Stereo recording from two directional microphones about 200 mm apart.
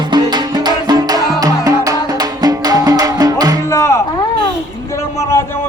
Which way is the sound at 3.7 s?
15° left (ahead or behind).